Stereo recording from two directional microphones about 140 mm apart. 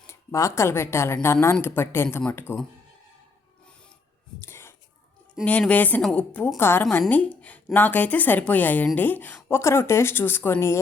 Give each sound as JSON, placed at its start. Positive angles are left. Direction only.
{"t": 0.1, "sound": "a woman's voice", "side_deg": 20}
{"t": 4.4, "sound": "a sound", "side_deg": 15}
{"t": 5.5, "sound": "a woman's voice", "side_deg": 10}